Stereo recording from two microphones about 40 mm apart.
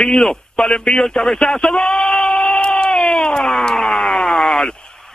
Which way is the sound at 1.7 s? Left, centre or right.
Centre.